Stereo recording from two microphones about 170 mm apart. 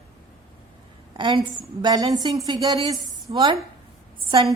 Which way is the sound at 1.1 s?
30° right (ahead or behind).